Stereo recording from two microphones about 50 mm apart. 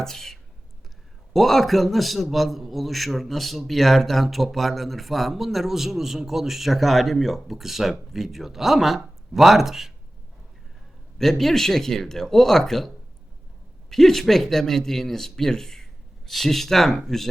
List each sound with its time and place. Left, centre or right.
0.0 s a man's voice: centre
11.2 s a man's voice: centre
13.9 s a man's voice: centre